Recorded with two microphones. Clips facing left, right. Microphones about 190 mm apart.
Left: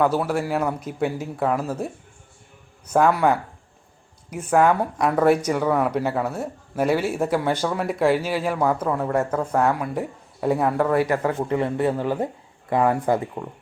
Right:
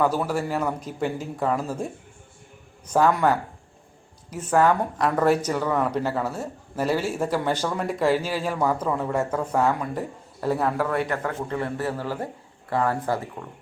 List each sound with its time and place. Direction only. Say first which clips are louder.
0.2 s speech: left 2 dB; 5° left (ahead or behind)
2.9 s speech: left 2 dB; 5° left (ahead or behind)
11.2 s speech: left 5 dB; 15° left (ahead or behind)